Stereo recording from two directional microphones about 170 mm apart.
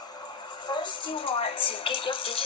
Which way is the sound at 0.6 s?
25° left (ahead or behind).